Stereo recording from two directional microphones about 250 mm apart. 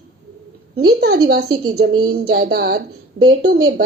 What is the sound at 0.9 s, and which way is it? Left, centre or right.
Speech, right.